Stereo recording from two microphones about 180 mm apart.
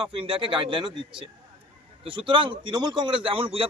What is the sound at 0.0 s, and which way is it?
A man's voice, 30° right (ahead or behind).